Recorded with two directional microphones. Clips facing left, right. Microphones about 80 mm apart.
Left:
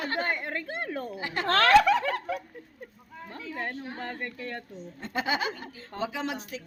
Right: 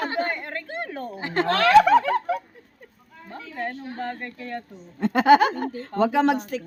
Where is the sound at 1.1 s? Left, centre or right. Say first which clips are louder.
Right 12 dB; right.